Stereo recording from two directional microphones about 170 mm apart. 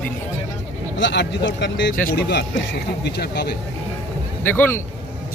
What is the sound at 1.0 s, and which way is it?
Speech, 90° left.